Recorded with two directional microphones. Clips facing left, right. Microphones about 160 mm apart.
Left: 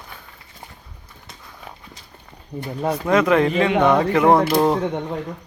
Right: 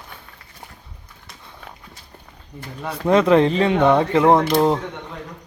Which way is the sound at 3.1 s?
30° right (ahead or behind).